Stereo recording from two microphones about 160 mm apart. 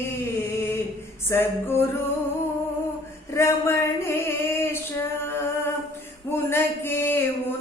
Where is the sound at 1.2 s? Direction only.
15° left (ahead or behind).